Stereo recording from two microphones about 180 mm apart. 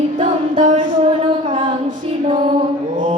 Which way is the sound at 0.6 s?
45° right (ahead or behind).